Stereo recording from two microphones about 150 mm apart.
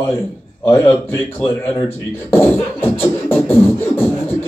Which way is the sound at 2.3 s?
15° left (ahead or behind).